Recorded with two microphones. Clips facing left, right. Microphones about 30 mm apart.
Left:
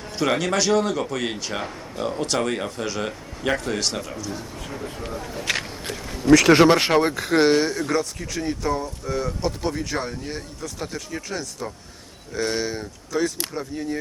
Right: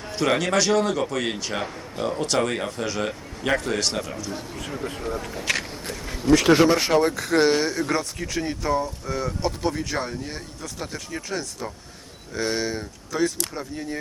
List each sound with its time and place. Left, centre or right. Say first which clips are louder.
0.2 s speech: even; centre
6.3 s speech: left 3 dB; left
6.7 s speech: left 3 dB; left
6.9 s speech: left 1 dB; centre